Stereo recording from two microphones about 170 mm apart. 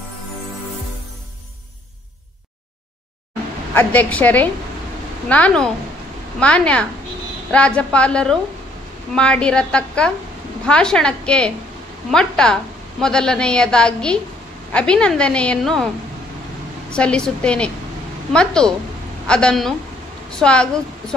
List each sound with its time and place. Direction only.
3.7 s a woman's voice: 10° left (ahead or behind)
16.9 s a woman's voice: 5° left (ahead or behind)